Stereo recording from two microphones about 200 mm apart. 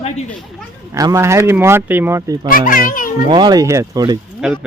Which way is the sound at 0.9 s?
15° right (ahead or behind).